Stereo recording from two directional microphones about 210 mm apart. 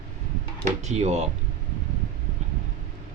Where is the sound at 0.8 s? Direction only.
30° right (ahead or behind).